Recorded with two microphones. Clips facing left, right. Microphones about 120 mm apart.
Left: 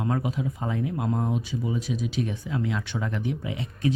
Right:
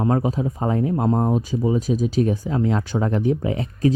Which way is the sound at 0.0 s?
35° right (ahead or behind).